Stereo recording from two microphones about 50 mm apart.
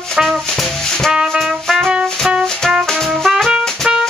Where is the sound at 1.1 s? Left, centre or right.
Centre.